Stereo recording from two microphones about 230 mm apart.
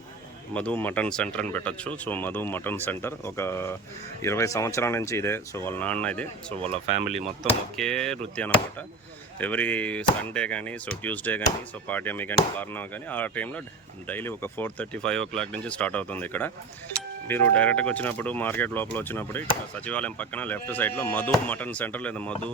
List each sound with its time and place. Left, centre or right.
0.5 s speech: centre
6.6 s speech: right
7.8 s speech: centre